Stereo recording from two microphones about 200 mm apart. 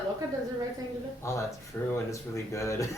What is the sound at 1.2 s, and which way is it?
Speech, 15° left (ahead or behind).